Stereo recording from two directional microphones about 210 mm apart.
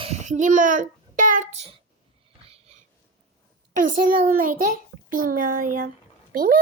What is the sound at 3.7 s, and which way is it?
A child's voice, 40° right (ahead or behind).